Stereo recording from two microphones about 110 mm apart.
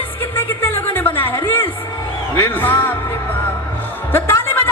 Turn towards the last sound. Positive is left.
turn(degrees=20)  # may be behind; listen again after turning